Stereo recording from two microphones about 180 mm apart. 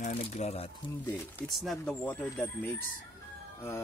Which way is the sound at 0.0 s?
35° left (ahead or behind).